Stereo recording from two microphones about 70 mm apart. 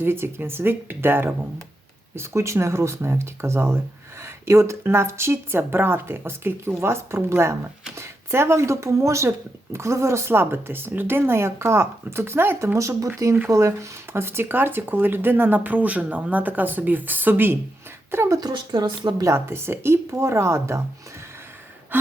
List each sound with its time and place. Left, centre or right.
0.0 s a woman's voice: right
18.3 s speech: right
19.2 s a woman's voice: right